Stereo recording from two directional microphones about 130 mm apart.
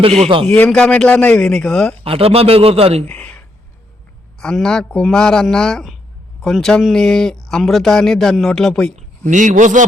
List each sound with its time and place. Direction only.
0.0 s speech: 55° right (ahead or behind)
0.3 s a man's voice: 45° right (ahead or behind)
0.5 s a man's voice: 10° left (ahead or behind)
2.0 s a man's voice: 45° right (ahead or behind)
3.1 s a sound: 10° left (ahead or behind)
4.4 s speech: 5° left (ahead or behind)
9.0 s speech: 70° right (ahead or behind)